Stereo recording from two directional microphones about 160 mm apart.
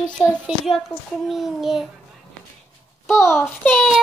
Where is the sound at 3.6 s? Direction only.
10° left (ahead or behind).